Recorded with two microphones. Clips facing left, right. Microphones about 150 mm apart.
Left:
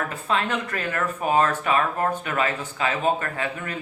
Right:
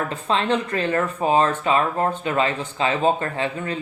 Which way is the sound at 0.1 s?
30° right (ahead or behind).